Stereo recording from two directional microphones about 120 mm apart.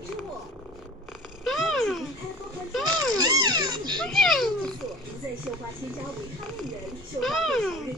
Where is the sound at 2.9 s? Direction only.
35° right (ahead or behind).